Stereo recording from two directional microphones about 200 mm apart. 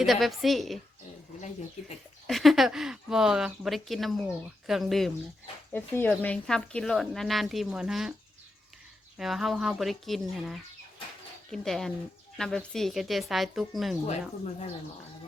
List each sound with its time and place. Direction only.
0.0 s speech: centre (ahead or behind)
2.2 s speech: centre (ahead or behind)
9.1 s speech: centre (ahead or behind)
14.1 s speech: 35° left (ahead or behind)